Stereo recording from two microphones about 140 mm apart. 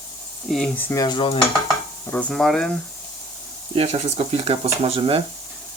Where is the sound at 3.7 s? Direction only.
45° right (ahead or behind).